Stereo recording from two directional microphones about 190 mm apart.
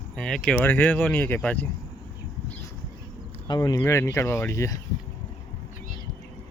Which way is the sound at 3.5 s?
20° left (ahead or behind).